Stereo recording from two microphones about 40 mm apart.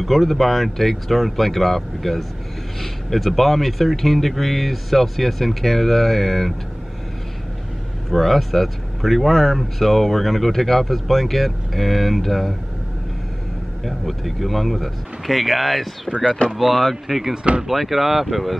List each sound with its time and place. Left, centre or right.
0.0 s speech: centre
8.1 s speech: centre
13.8 s speech: centre
17.4 s speech: right
17.6 s speech: centre